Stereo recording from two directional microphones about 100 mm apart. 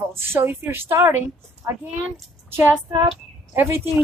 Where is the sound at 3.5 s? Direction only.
25° right (ahead or behind).